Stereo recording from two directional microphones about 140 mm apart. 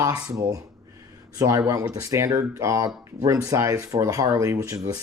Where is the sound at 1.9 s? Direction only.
20° right (ahead or behind).